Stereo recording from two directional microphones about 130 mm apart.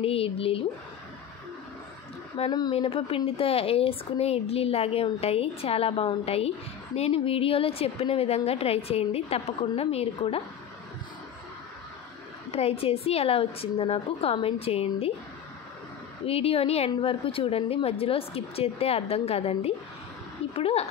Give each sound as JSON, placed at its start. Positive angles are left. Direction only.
{"t": 0.0, "sound": "a woman's voice", "side_deg": 45}
{"t": 2.4, "sound": "a woman's voice", "side_deg": 45}
{"t": 12.4, "sound": "a woman's voice", "side_deg": 50}
{"t": 16.3, "sound": "a woman's voice", "side_deg": 50}